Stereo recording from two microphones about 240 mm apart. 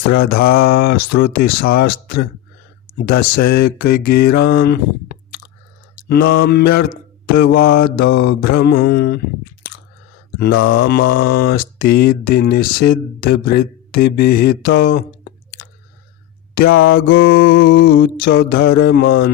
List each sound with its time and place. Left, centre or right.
0.1 s mantra: left
10.6 s mantra: left
14.8 s speech: left
16.6 s mantra: left
17.1 s mantra: left